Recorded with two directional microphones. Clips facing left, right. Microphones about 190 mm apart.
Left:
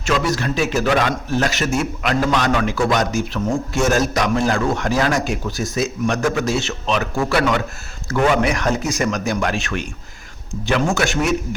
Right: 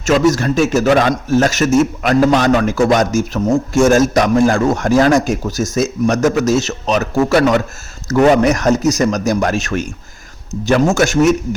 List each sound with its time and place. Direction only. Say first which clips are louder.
0.0 s a man's voice: right 7 dB; 45° right (ahead or behind)